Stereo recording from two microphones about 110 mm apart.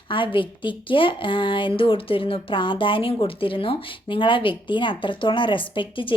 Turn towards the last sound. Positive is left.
turn(degrees=50)  # may be behind; listen again after turning